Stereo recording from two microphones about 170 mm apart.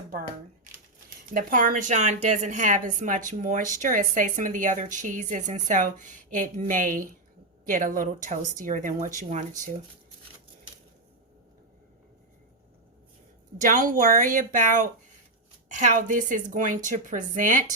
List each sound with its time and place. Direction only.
0.2 s a sound: 50° right (ahead or behind)
1.3 s speech: 55° right (ahead or behind)
13.7 s speech: 55° right (ahead or behind)